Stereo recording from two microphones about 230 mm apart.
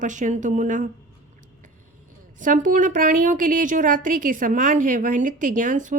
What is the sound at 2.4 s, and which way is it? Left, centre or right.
A woman's voice, right.